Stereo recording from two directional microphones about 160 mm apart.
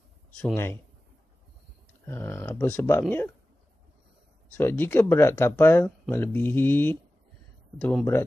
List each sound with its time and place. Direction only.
2.0 s speech: 15° left (ahead or behind)
4.6 s speech: 10° left (ahead or behind)